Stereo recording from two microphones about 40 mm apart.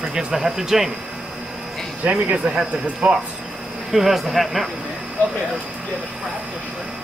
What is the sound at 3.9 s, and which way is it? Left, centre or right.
Speech, centre.